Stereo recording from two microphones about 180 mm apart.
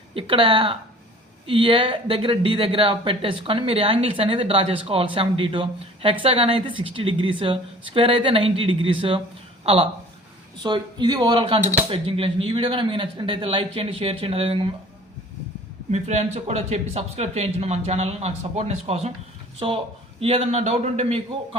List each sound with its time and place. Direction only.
0.1 s speech: 30° right (ahead or behind)
15.9 s speech: 40° right (ahead or behind)